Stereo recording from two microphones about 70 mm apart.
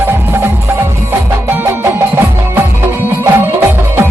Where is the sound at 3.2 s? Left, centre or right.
Right.